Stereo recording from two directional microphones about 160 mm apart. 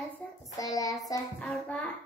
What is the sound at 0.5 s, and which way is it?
Speech, 20° left (ahead or behind).